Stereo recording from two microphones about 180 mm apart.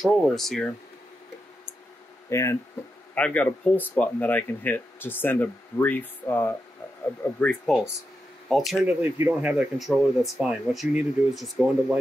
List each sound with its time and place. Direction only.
0.0 s speech: centre (ahead or behind)
2.2 s speech: 15° left (ahead or behind); by 12.0 s centre (ahead or behind)